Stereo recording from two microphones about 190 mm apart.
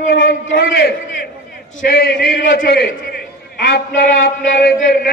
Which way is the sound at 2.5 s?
55° left (ahead or behind).